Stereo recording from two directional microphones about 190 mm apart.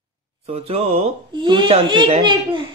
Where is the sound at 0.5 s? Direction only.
30° right (ahead or behind).